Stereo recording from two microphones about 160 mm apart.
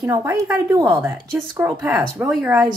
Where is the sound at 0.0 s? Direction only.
20° right (ahead or behind).